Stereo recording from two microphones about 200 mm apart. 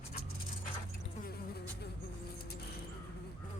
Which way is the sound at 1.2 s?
55° left (ahead or behind).